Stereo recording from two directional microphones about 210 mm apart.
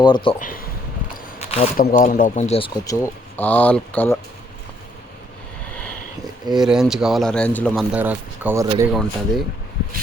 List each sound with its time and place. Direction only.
0.0 s speech: 20° left (ahead or behind)
0.3 s speech: 40° left (ahead or behind)
1.1 s a sound: 30° left (ahead or behind)
1.7 s speech: 45° left (ahead or behind); by 4.2 s 10° left (ahead or behind)
6.6 s speech: centre (ahead or behind)
7.9 s speech: 10° right (ahead or behind)